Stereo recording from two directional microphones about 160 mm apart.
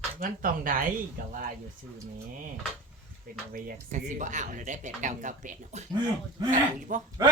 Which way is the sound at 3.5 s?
50° right (ahead or behind).